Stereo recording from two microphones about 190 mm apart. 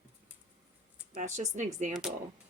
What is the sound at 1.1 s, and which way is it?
Speech, 40° right (ahead or behind).